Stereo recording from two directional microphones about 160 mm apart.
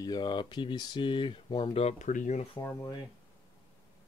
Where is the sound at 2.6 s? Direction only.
20° left (ahead or behind).